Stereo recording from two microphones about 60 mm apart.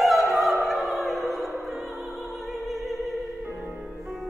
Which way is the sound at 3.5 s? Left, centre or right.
Centre.